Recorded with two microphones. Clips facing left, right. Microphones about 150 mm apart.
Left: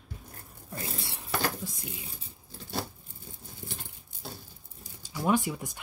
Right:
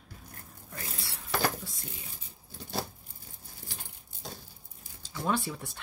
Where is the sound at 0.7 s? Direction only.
25° left (ahead or behind).